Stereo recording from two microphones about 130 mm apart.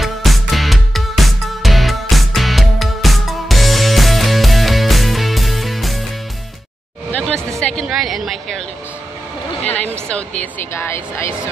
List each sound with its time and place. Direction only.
0.0 s music: centre (ahead or behind)
7.1 s hubbub: 10° left (ahead or behind)
7.8 s a sound: 5° right (ahead or behind)
10.0 s speech: 5° left (ahead or behind)
10.7 s speech: 20° left (ahead or behind)